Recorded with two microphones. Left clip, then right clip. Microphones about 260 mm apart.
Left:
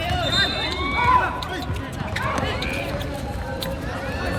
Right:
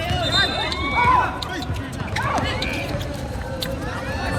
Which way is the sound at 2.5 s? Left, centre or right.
Centre.